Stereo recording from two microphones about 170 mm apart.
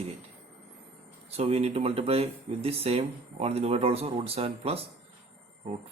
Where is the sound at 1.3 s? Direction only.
35° right (ahead or behind).